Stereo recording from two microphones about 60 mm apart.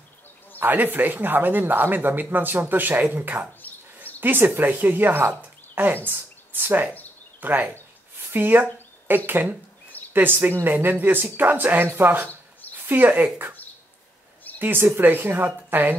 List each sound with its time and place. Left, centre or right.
0.6 s speech: right
3.6 s a sound: left
4.0 s bird: right
4.6 s speech: right
14.6 s speech: right